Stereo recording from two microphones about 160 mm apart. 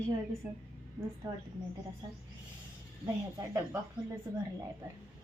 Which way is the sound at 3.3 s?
20° right (ahead or behind).